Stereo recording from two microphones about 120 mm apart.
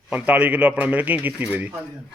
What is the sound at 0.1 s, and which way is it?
A man's voice, 15° right (ahead or behind).